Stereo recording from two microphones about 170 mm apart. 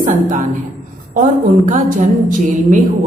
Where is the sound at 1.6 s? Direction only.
50° right (ahead or behind).